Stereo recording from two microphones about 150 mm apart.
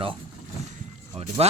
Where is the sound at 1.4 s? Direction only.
45° right (ahead or behind).